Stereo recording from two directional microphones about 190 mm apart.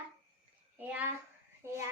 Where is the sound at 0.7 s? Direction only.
10° right (ahead or behind).